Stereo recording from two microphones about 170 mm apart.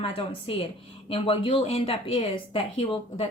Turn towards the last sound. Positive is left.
turn(degrees=30)  # may be behind; listen again after turning